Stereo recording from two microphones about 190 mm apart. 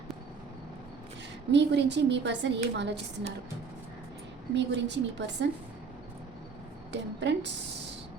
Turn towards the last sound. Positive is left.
turn(degrees=-65)  # may be behind; listen again after turning